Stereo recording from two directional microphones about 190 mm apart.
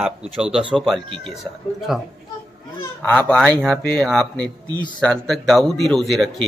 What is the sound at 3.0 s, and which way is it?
Speech, 5° left (ahead or behind).